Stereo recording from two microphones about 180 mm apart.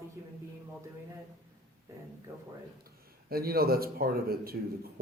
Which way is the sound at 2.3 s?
15° right (ahead or behind).